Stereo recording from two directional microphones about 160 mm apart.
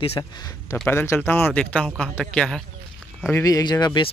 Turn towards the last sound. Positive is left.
turn(degrees=25)  # may be behind; listen again after turning